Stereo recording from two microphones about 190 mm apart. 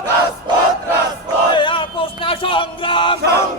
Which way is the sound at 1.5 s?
25° left (ahead or behind).